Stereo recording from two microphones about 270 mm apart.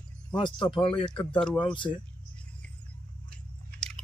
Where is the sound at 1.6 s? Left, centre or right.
Centre.